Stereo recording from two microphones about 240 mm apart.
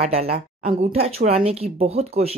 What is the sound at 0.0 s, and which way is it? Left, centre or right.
Speech, right.